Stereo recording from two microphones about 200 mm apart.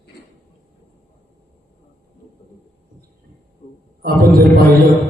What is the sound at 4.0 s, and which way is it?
Mantra, 45° right (ahead or behind).